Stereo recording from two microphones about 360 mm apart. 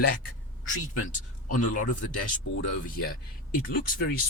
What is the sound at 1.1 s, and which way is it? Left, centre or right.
Speech, left.